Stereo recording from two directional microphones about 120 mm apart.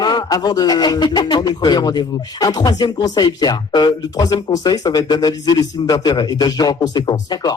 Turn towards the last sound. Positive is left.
turn(degrees=35)  # may be behind; listen again after turning